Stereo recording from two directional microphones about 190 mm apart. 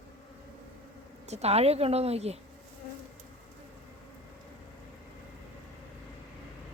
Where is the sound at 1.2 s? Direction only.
35° right (ahead or behind).